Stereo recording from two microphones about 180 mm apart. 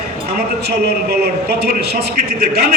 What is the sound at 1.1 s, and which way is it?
A man's voice, 65° right (ahead or behind).